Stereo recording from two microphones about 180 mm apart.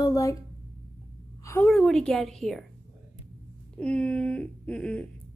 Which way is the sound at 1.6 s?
Centre (ahead or behind).